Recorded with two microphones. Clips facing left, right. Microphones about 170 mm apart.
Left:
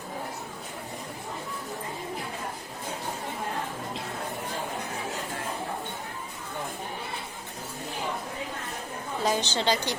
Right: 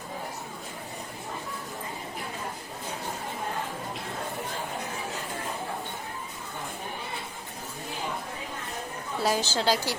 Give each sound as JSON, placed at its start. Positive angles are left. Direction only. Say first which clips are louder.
{"t": 9.2, "sound": "a woman's voice", "louder": "right 1 dB", "side_deg": -5}